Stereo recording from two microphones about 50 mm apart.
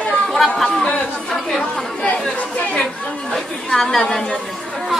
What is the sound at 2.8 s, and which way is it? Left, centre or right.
A woman's voice, centre.